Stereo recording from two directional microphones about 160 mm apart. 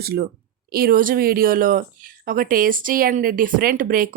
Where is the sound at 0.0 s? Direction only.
75° right (ahead or behind).